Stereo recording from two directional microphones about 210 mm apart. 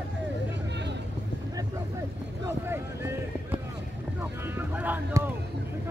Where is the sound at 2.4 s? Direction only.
10° right (ahead or behind).